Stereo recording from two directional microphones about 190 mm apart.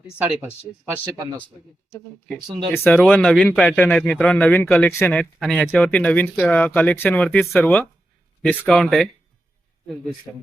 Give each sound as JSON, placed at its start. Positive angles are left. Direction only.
{"t": 1.1, "sound": "speech", "side_deg": -15}
{"t": 2.2, "sound": "speech", "side_deg": 5}
{"t": 5.2, "sound": "a man's voice", "side_deg": 0}